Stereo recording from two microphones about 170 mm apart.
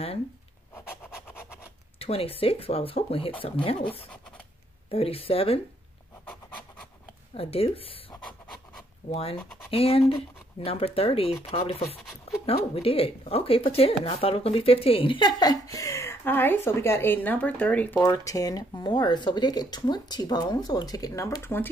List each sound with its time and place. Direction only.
0.7 s rub: 10° left (ahead or behind)
2.0 s speech: 35° left (ahead or behind)
4.9 s speech: 35° left (ahead or behind)
7.3 s speech: 35° left (ahead or behind)
9.1 s speech: 35° left (ahead or behind); by 21.6 s 15° left (ahead or behind)